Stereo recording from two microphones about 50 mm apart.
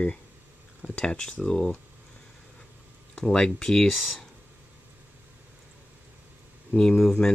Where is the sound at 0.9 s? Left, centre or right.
Centre.